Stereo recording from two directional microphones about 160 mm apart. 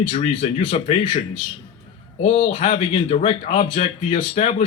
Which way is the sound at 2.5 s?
50° left (ahead or behind).